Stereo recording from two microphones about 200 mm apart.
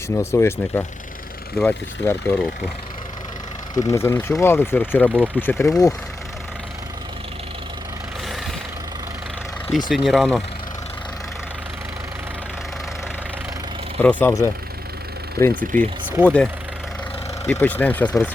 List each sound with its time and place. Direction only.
0.2 s speech: 15° left (ahead or behind)
3.8 s speech: 15° left (ahead or behind)
9.7 s speech: centre (ahead or behind)
14.0 s speech: 10° left (ahead or behind)
15.4 s speech: 50° right (ahead or behind)
15.7 s speech: 10° left (ahead or behind)